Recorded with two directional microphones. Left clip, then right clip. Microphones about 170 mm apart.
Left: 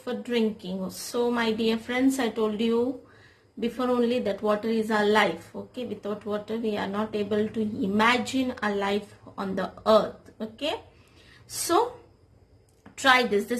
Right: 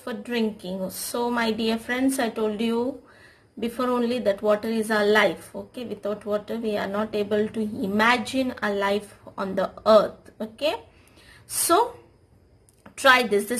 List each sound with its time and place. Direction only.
0.0 s a woman's voice: 25° right (ahead or behind)
12.9 s a woman's voice: 30° right (ahead or behind)